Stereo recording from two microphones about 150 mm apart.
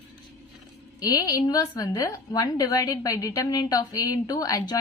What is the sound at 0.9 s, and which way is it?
A woman's voice, 25° left (ahead or behind).